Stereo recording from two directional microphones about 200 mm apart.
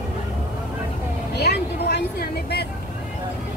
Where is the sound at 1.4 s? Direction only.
50° left (ahead or behind).